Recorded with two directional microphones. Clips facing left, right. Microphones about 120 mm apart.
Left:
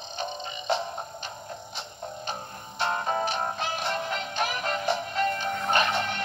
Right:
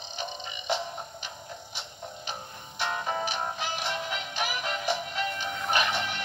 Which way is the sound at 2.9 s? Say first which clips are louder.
Left 3 dB; 40° left (ahead or behind).